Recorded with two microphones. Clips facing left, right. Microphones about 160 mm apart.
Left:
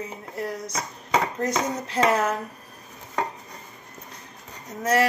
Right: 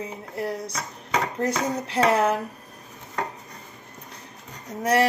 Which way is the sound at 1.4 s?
30° right (ahead or behind).